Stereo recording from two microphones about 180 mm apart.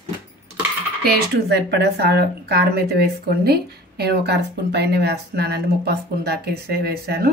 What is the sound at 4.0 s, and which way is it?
Speech, 65° right (ahead or behind).